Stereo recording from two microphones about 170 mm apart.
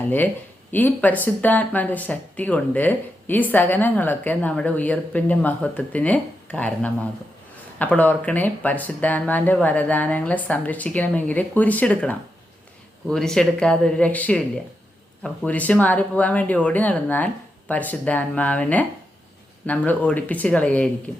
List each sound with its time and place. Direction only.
0.7 s speech: 10° left (ahead or behind)